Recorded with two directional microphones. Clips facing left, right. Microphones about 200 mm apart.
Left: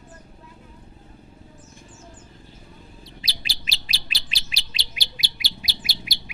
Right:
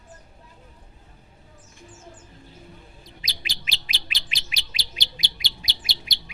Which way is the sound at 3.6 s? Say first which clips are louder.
Even; 35° left (ahead or behind).